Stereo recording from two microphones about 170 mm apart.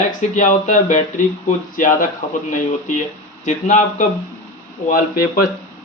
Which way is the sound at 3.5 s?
45° left (ahead or behind).